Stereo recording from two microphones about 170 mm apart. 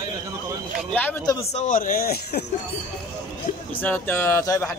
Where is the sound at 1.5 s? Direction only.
50° left (ahead or behind); by 2.4 s 65° left (ahead or behind).